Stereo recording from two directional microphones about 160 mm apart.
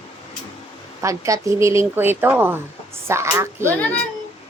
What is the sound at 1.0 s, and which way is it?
A woman's voice, 20° right (ahead or behind).